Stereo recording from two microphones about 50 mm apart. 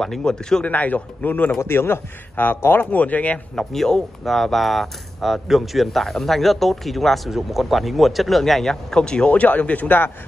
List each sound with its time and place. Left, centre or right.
0.0 s speech: centre
0.7 s a man's voice: left
1.6 s a man's voice: left
3.0 s a man's voice: left
3.5 s speech: centre
9.3 s a man's voice: left